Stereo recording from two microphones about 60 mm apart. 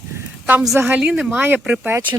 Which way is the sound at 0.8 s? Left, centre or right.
Centre.